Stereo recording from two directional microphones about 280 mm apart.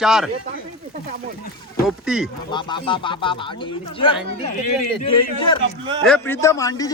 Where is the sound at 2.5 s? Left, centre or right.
Centre.